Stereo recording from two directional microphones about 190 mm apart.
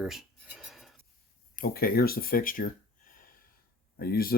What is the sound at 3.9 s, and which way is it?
Speech, 55° left (ahead or behind).